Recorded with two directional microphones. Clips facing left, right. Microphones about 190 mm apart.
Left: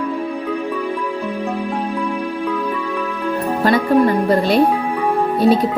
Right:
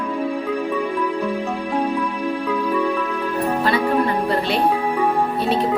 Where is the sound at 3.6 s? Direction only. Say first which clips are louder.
Left 7 dB; 40° left (ahead or behind).